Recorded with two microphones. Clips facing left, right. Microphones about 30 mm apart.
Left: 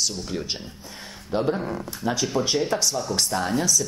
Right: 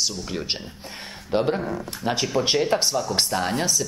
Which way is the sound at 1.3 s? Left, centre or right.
Right.